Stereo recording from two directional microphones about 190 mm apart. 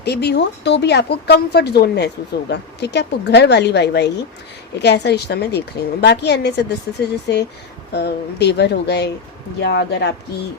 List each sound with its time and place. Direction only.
0.0 s speech: 60° left (ahead or behind)
7.9 s speech: 60° left (ahead or behind)